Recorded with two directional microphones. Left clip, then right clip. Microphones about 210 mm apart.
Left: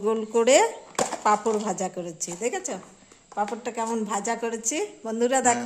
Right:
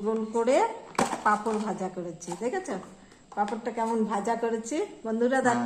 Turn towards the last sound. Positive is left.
turn(degrees=55)  # may be behind; listen again after turning